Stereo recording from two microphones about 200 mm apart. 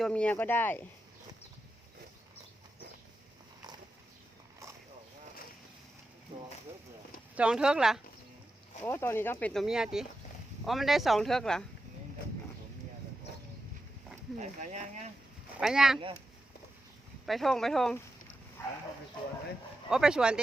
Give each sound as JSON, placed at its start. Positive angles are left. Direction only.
{"t": 0.0, "sound": "speech", "side_deg": 5}
{"t": 7.3, "sound": "speech", "side_deg": -5}
{"t": 8.8, "sound": "speech", "side_deg": 15}
{"t": 14.3, "sound": "speech", "side_deg": -35}
{"t": 15.5, "sound": "speech", "side_deg": -5}
{"t": 17.2, "sound": "speech", "side_deg": 0}
{"t": 18.6, "sound": "dog", "side_deg": 10}
{"t": 19.9, "sound": "speech", "side_deg": -5}